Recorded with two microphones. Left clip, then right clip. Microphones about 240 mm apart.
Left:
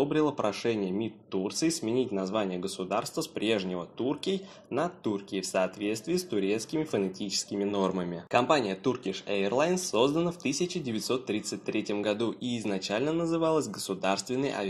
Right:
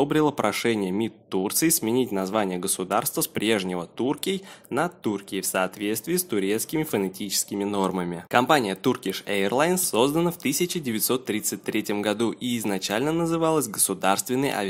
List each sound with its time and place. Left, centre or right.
0.0 s speech: right